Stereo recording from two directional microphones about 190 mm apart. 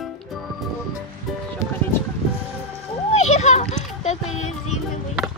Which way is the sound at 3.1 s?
35° left (ahead or behind).